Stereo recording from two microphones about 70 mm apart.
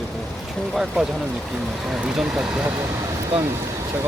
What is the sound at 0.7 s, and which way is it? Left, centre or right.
Speech, centre.